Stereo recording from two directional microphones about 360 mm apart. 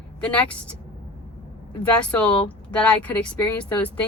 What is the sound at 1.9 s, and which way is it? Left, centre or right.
Speech, centre.